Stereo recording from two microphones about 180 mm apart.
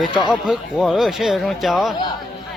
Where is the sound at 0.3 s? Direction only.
Centre (ahead or behind).